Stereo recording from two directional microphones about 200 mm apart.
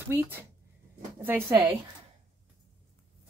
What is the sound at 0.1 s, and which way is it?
A woman's voice, 10° right (ahead or behind).